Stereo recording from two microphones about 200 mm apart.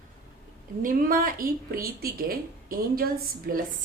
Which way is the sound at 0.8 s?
45° right (ahead or behind).